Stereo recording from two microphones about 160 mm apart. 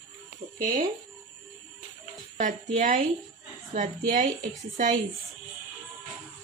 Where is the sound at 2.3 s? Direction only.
55° right (ahead or behind).